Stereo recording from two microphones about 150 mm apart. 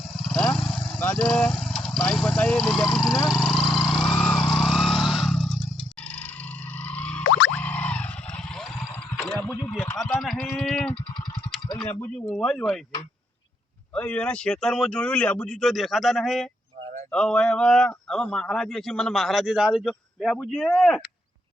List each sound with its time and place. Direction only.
0.2 s vehicle: 5° left (ahead or behind)
6.8 s boing: 10° left (ahead or behind)
9.1 s a sound: centre (ahead or behind)
9.4 s a sound: 15° left (ahead or behind)
10.0 s a sound: centre (ahead or behind)
10.6 s sheep: 5° left (ahead or behind)
11.9 s speech: 15° left (ahead or behind)
12.1 s a man's voice: 5° left (ahead or behind)
13.9 s a man's voice: 5° left (ahead or behind)